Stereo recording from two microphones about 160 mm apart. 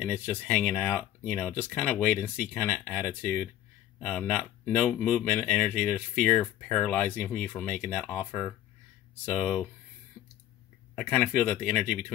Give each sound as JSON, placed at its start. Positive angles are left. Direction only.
{"t": 0.0, "sound": "speech", "side_deg": 10}
{"t": 10.2, "sound": "a sound", "side_deg": -15}
{"t": 11.0, "sound": "speech", "side_deg": 10}